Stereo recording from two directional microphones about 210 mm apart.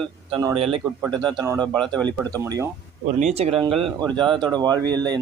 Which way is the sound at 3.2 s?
30° right (ahead or behind).